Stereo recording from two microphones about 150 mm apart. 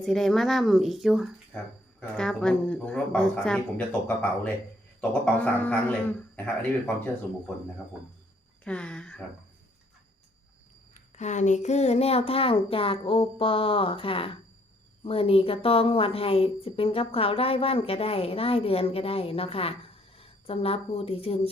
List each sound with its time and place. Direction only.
0.0 s speech: centre (ahead or behind)
8.6 s speech: 5° left (ahead or behind)
11.2 s a woman's voice: 50° left (ahead or behind)